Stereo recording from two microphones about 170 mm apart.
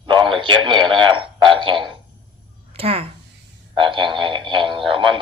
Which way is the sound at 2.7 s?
35° right (ahead or behind).